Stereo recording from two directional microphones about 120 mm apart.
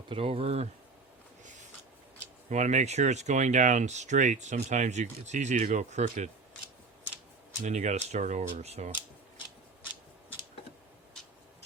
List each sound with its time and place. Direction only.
0.1 s speech: 50° right (ahead or behind)
2.5 s speech: 75° right (ahead or behind)
7.6 s speech: 90° right; by 8.9 s 65° right (ahead or behind)